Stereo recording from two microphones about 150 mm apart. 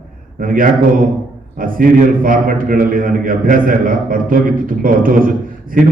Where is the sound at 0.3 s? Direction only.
65° right (ahead or behind).